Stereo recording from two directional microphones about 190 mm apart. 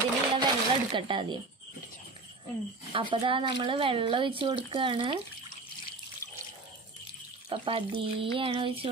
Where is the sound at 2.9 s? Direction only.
25° right (ahead or behind).